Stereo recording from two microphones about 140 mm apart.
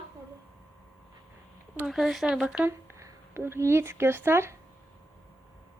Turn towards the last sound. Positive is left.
turn(degrees=-15)  # may be behind; listen again after turning